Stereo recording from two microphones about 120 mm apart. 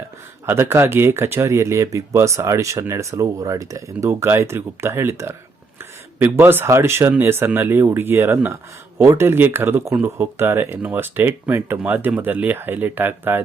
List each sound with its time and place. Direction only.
0.4 s speech: 20° right (ahead or behind)